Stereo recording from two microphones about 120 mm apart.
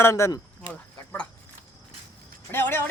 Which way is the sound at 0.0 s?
20° left (ahead or behind).